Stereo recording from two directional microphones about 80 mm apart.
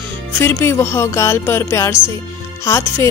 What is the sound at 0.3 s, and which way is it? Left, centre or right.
Speech, left.